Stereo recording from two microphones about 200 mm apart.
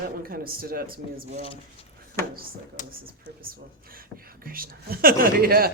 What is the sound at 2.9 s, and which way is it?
Speech, 45° right (ahead or behind).